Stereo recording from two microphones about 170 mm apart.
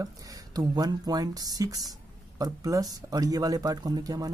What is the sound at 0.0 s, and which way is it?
Speech, 20° right (ahead or behind).